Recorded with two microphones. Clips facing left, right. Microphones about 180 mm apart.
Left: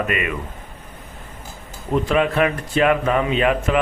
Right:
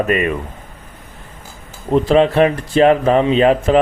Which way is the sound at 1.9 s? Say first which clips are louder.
Right 6 dB; 30° right (ahead or behind).